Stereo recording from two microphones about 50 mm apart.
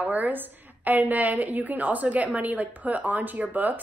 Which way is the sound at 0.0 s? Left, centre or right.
Right.